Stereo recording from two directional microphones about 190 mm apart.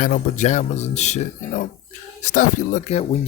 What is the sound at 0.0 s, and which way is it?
Speech, 40° left (ahead or behind).